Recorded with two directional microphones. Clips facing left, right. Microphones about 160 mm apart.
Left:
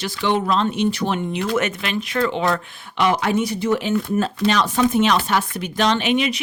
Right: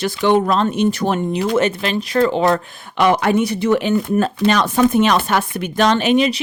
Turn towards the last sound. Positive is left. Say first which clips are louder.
# right 5 dB
turn(degrees=-35)  # may be behind; listen again after turning